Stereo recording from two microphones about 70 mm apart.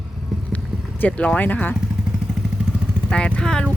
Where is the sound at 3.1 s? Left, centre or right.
Centre.